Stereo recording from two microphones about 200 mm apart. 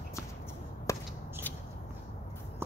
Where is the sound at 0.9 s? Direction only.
15° left (ahead or behind).